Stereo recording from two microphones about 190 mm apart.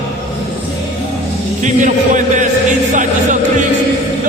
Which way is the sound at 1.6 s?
40° right (ahead or behind).